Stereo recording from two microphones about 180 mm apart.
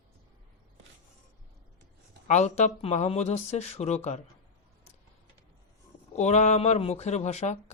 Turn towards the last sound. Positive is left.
turn(degrees=40)  # may be behind; listen again after turning